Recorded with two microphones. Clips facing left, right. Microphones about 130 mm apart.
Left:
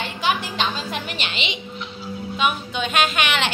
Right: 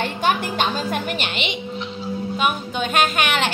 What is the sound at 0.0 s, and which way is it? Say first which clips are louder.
A woman's voice: right 3 dB; 50° right (ahead or behind).